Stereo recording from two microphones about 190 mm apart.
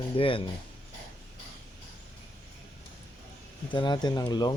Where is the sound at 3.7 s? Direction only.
25° left (ahead or behind).